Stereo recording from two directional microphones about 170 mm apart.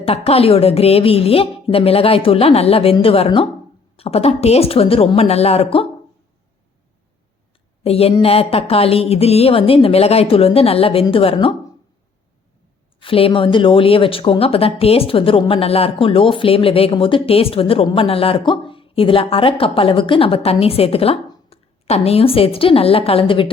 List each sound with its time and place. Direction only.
0.0 s speech: 35° left (ahead or behind)
7.9 s speech: 35° left (ahead or behind)
13.0 s a woman's voice: 30° left (ahead or behind)